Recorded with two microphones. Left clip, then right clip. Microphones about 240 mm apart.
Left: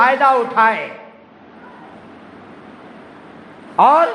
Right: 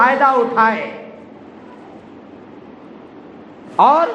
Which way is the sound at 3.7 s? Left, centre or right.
Left.